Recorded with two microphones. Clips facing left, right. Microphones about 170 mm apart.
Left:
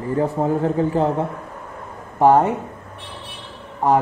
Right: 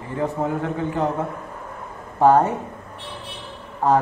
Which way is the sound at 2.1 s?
15° left (ahead or behind).